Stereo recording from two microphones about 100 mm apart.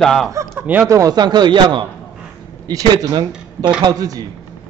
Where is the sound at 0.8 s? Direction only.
35° right (ahead or behind); by 1.9 s 50° right (ahead or behind).